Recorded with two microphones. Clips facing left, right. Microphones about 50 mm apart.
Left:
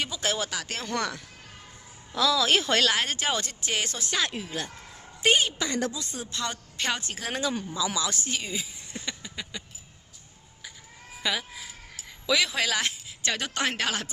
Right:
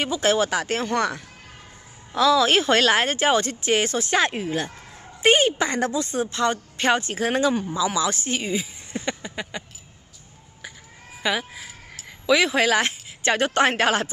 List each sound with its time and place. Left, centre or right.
0.0 s a woman's voice: right
11.2 s chicken: right
12.3 s speech: right